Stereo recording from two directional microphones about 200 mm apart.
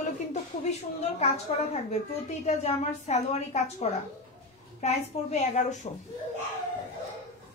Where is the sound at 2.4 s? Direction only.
35° left (ahead or behind).